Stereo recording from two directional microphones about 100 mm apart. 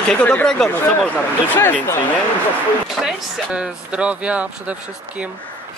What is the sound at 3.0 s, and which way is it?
Speech, centre (ahead or behind).